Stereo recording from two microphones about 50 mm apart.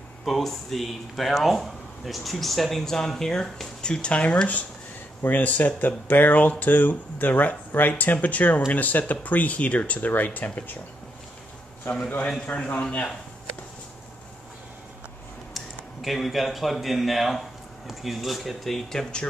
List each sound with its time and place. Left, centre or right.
0.2 s speech: centre; by 10.8 s left
12.4 s a man's voice: left
15.5 s speech: centre